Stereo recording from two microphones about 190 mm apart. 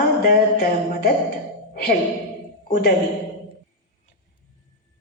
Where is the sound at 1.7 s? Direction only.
50° left (ahead or behind).